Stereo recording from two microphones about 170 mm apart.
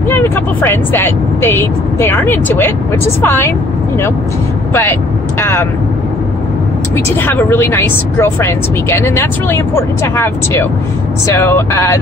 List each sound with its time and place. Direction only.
0.1 s speech: 15° left (ahead or behind)
5.4 s speech: 15° left (ahead or behind)
7.2 s speech: 10° left (ahead or behind)